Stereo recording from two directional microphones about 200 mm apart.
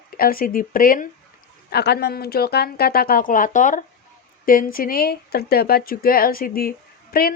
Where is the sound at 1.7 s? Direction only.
55° left (ahead or behind).